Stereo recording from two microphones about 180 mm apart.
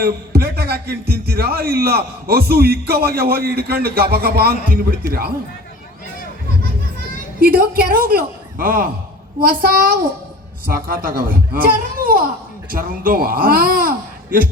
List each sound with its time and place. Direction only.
0.0 s a man's voice: 60° right (ahead or behind)
7.3 s speech: 55° right (ahead or behind)